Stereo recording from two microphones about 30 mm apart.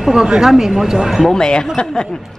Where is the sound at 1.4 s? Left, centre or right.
Left.